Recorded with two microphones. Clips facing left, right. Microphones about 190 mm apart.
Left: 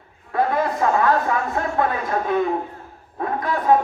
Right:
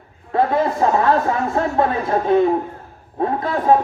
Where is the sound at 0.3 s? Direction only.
25° right (ahead or behind).